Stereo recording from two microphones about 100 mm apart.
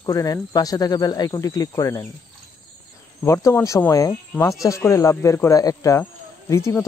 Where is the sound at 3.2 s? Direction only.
30° left (ahead or behind).